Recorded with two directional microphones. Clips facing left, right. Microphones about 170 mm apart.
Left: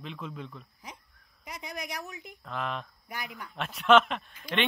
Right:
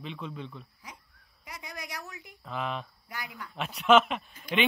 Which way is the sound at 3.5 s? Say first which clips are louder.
Even; centre (ahead or behind).